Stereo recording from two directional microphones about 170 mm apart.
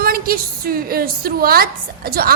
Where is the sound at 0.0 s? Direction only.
60° right (ahead or behind).